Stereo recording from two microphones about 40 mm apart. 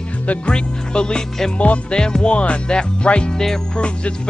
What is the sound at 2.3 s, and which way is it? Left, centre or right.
Music, left.